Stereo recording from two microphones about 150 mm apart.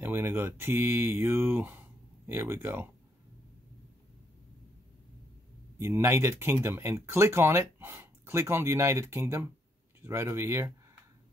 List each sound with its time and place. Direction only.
0.0 s speech: 15° right (ahead or behind)
5.8 s speech: 15° right (ahead or behind)